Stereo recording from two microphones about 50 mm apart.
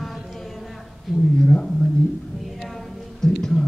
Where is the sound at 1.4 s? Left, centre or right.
Centre.